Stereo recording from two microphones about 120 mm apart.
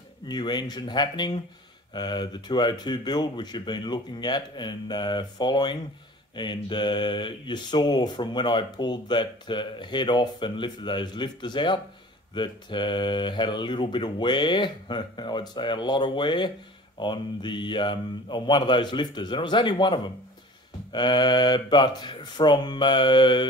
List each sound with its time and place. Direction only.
0.3 s speech: 40° left (ahead or behind)